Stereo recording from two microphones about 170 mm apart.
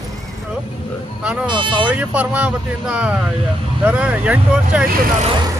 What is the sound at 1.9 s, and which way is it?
Speech, 10° right (ahead or behind).